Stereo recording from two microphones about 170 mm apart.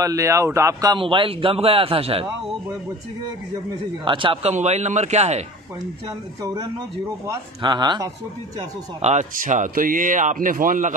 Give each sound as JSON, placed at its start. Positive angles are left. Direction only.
{"t": 0.0, "sound": "a man's voice", "side_deg": -20}
{"t": 4.0, "sound": "speech", "side_deg": -30}
{"t": 6.0, "sound": "a man's voice", "side_deg": -20}
{"t": 9.0, "sound": "speech", "side_deg": -45}